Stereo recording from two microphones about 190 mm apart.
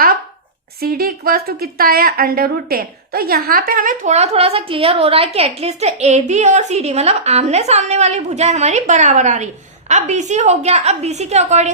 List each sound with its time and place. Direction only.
0.8 s a woman's voice: 50° right (ahead or behind); by 11.7 s 35° right (ahead or behind)